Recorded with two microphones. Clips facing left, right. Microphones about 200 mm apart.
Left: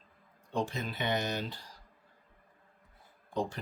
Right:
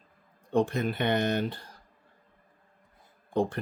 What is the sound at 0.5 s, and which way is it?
Speech, 55° right (ahead or behind).